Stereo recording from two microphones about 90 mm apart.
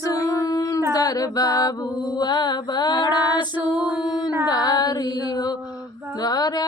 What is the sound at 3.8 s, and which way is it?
Music, 10° right (ahead or behind).